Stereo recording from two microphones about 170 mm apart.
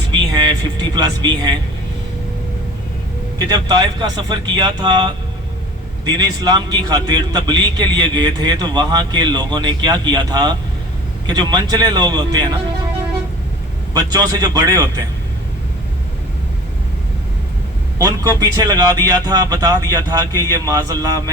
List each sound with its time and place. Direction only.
0.1 s speech: 25° right (ahead or behind)
3.3 s a man's voice: 25° right (ahead or behind)
13.9 s a man's voice: 25° right (ahead or behind)
18.0 s a man's voice: 20° right (ahead or behind)